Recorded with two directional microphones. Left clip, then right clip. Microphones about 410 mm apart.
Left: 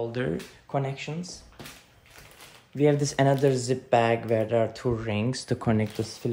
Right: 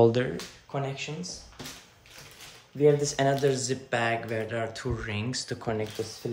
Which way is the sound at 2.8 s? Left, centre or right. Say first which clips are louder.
Even; centre.